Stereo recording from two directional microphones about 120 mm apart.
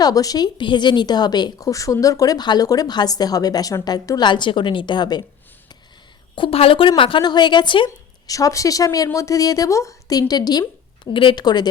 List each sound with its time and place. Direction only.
0.0 s speech: 30° left (ahead or behind)
6.3 s speech: 50° left (ahead or behind)
8.3 s speech: 30° left (ahead or behind)